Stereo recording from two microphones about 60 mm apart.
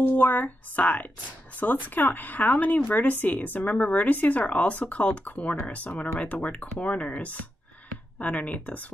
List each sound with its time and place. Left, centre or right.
0.0 s speech: left